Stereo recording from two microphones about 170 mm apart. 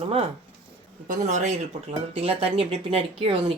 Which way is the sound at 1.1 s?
45° right (ahead or behind).